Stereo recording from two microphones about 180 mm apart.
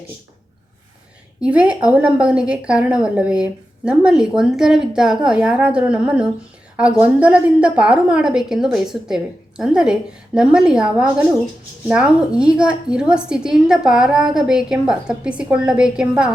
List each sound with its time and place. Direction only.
1.4 s a woman's voice: 5° right (ahead or behind)